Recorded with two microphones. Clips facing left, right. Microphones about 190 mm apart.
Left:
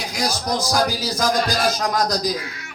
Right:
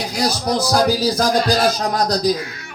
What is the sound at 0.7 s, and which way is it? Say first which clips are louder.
Speech: right 7 dB; 35° right (ahead or behind).